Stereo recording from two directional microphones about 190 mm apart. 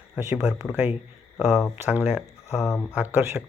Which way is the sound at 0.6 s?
5° right (ahead or behind).